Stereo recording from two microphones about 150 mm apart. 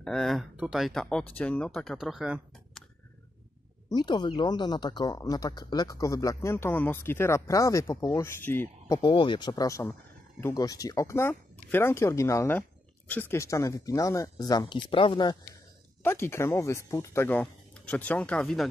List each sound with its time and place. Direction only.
0.0 s speech: 5° left (ahead or behind)
3.9 s speech: 30° left (ahead or behind)
9.1 s speech: 35° left (ahead or behind)
16.0 s speech: 15° left (ahead or behind)